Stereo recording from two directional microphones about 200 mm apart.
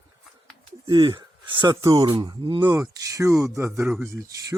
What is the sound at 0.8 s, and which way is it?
Speech, 25° right (ahead or behind).